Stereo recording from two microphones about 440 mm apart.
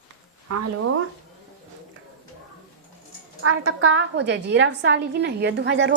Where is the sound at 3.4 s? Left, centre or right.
Right.